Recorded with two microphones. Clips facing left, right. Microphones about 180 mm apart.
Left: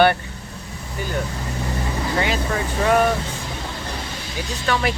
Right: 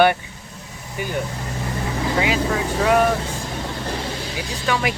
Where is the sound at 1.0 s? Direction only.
15° right (ahead or behind).